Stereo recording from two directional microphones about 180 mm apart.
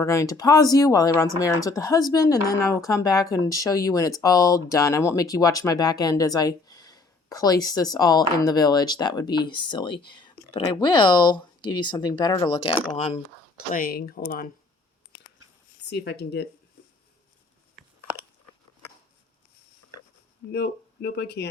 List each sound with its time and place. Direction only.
0.0 s speech: 15° left (ahead or behind)
13.0 s speech: 35° left (ahead or behind)
13.7 s speech: 55° left (ahead or behind)
15.9 s speech: 65° left (ahead or behind)
20.5 s speech: 65° left (ahead or behind)